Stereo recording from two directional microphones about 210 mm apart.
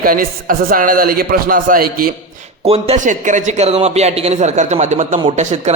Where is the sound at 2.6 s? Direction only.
30° right (ahead or behind).